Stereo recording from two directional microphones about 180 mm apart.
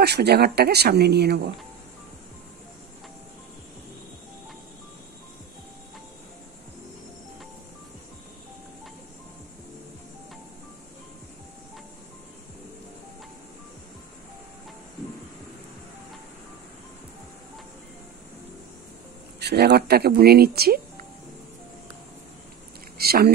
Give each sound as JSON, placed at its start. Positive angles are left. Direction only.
{"t": 0.0, "sound": "speech", "side_deg": -65}
{"t": 19.4, "sound": "speech", "side_deg": -65}
{"t": 22.9, "sound": "a sound", "side_deg": -60}